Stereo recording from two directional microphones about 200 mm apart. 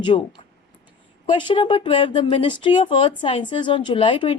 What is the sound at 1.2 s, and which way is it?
Speech, 25° left (ahead or behind).